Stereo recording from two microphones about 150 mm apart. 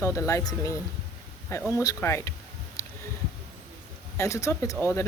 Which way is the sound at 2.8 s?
20° left (ahead or behind).